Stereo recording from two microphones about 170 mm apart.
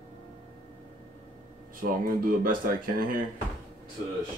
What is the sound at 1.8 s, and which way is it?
Speech, 55° right (ahead or behind).